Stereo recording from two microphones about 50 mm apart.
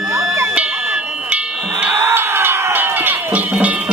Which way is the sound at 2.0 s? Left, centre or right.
Right.